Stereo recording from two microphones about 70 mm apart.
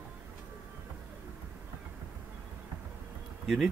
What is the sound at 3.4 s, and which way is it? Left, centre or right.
Speech, centre.